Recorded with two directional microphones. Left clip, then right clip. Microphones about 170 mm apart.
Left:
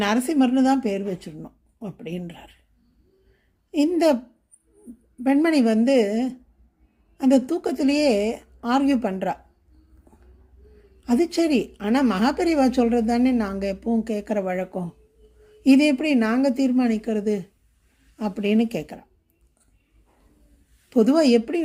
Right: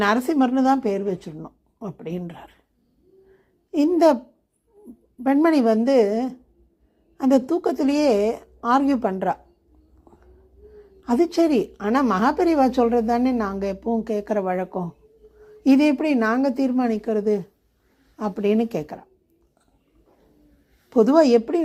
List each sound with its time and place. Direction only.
0.0 s a woman's voice: 15° left (ahead or behind)
3.7 s a woman's voice: 15° left (ahead or behind)
5.2 s a woman's voice: 15° left (ahead or behind)
11.0 s a woman's voice: 20° left (ahead or behind)
20.9 s a woman's voice: 20° left (ahead or behind)